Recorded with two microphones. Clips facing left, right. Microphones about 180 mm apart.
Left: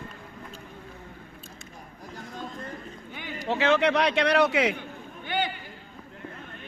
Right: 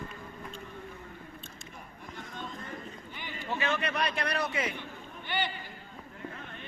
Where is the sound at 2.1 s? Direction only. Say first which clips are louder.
Left 4 dB; 40° left (ahead or behind).